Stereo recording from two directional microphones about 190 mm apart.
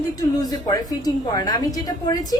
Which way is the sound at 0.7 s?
20° left (ahead or behind).